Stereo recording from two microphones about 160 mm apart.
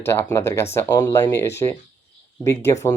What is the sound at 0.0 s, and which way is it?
Speech, 15° left (ahead or behind).